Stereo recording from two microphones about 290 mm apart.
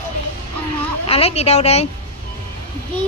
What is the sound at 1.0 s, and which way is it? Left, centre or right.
Speech, centre.